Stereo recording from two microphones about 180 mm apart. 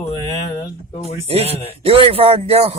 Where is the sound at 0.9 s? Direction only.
35° left (ahead or behind).